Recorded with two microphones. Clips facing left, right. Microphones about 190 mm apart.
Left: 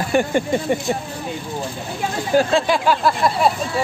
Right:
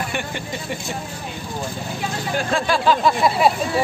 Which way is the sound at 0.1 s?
40° left (ahead or behind).